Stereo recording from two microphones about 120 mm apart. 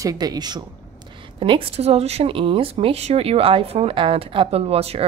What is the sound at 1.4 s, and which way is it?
Speech, 50° right (ahead or behind).